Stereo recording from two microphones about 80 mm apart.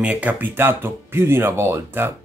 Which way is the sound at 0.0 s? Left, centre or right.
Centre.